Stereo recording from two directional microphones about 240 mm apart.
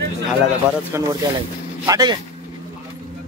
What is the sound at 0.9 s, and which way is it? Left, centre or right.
A man's voice, centre.